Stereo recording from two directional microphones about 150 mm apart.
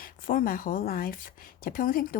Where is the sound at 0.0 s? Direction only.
70° left (ahead or behind).